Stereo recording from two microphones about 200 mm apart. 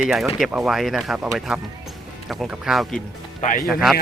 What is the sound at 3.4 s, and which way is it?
Speech, 40° left (ahead or behind).